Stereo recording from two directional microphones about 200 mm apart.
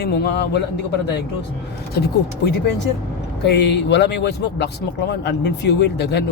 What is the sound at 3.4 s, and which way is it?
Speech, 55° left (ahead or behind).